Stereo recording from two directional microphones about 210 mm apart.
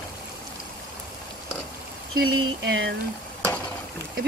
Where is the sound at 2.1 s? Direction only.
55° right (ahead or behind).